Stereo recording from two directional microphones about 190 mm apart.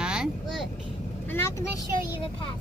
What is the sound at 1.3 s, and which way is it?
Speech, 15° left (ahead or behind).